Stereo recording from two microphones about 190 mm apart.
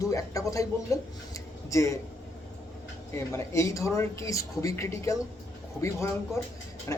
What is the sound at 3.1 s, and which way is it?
Speech, 15° left (ahead or behind).